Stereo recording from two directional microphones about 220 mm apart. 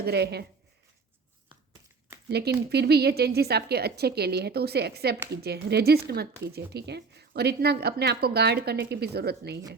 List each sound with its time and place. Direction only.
0.0 s a woman's voice: 50° right (ahead or behind)
2.6 s a woman's voice: 45° right (ahead or behind)